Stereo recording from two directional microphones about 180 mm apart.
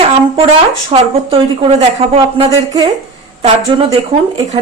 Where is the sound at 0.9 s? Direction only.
30° right (ahead or behind).